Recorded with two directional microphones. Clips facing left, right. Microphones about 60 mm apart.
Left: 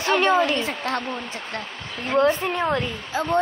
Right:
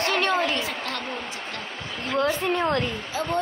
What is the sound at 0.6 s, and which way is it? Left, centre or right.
Speech, left.